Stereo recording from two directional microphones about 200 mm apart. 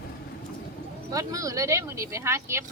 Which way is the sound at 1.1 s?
15° right (ahead or behind).